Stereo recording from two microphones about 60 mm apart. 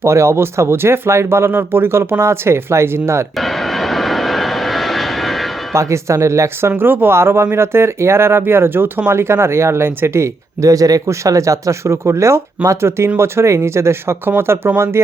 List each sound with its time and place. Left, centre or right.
0.0 s speech: right
3.4 s vehicle: centre
5.7 s speech: right
10.6 s speech: right